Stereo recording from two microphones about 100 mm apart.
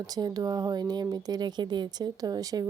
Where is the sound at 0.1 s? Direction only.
40° right (ahead or behind).